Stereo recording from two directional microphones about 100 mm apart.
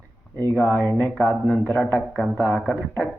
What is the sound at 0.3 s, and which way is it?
A man's voice, 20° left (ahead or behind).